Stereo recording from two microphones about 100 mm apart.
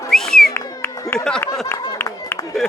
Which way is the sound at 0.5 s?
25° left (ahead or behind).